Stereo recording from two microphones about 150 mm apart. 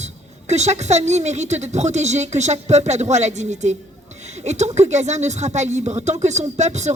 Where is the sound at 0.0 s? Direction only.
50° right (ahead or behind).